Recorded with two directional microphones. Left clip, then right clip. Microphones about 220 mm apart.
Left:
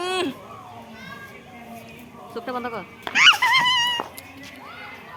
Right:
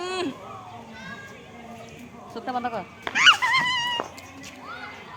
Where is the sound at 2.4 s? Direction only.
10° right (ahead or behind).